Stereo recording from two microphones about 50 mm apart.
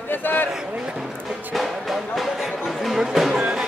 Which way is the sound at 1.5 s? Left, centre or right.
Centre.